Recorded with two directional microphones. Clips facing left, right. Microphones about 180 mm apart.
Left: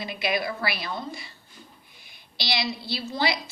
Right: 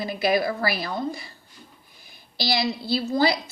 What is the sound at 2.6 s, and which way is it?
Speech, 45° right (ahead or behind).